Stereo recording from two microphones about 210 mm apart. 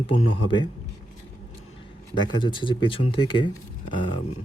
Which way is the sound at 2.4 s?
20° left (ahead or behind).